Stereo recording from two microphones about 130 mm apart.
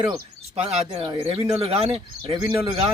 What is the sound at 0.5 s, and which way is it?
Speech, 55° right (ahead or behind).